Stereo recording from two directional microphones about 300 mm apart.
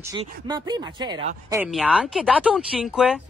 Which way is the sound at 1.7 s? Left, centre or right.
Centre.